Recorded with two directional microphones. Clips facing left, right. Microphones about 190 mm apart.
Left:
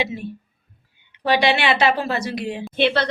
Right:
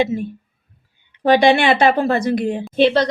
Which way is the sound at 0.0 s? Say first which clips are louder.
Right 7 dB; 50° right (ahead or behind).